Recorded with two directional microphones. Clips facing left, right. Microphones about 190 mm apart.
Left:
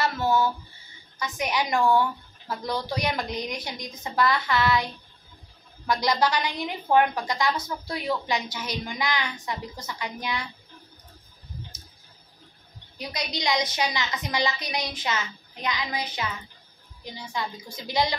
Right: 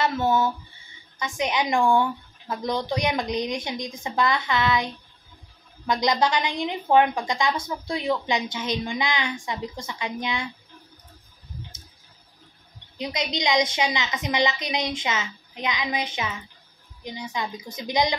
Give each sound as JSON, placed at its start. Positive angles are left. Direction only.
{"t": 0.0, "sound": "a woman's voice", "side_deg": -25}
{"t": 12.9, "sound": "a woman's voice", "side_deg": -20}